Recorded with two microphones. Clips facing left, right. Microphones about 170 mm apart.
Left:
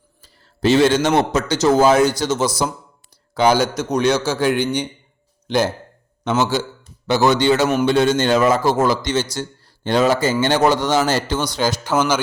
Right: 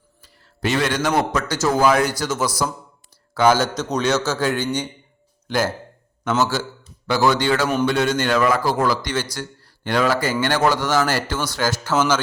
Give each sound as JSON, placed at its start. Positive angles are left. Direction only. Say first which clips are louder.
{"t": 0.2, "sound": "a man's voice", "louder": "left 5 dB", "side_deg": 30}
{"t": 7.1, "sound": "speech", "louder": "left 3 dB", "side_deg": 20}